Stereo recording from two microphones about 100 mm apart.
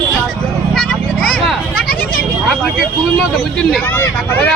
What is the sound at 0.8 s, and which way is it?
Vehicle, 5° left (ahead or behind).